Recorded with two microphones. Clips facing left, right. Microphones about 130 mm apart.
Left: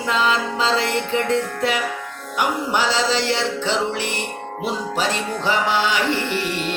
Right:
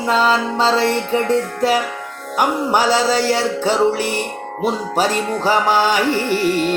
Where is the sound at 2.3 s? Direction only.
45° right (ahead or behind).